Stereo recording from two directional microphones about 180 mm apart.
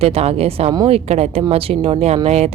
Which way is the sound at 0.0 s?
35° right (ahead or behind).